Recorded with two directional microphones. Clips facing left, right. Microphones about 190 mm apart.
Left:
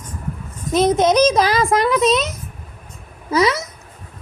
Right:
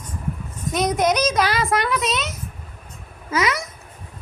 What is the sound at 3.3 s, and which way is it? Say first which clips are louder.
Speech: left 5 dB; 30° left (ahead or behind).